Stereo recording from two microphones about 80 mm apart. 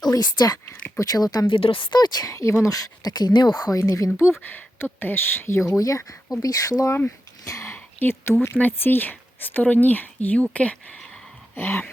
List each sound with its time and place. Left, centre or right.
0.0 s speech: left
1.5 s speech: left
2.3 s speech: left
3.7 s speech: left
4.4 s speech: left
5.6 s speech: left
7.4 s whispering: left
7.7 s a sound: left
8.5 s speech: left
11.5 s speech: left